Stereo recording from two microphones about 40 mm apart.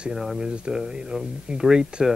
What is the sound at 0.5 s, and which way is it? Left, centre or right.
Speech, right.